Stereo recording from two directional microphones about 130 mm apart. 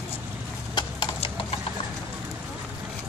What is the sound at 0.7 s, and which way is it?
Clip-clop, 40° left (ahead or behind).